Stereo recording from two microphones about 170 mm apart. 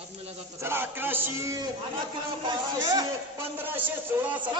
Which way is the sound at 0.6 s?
15° right (ahead or behind).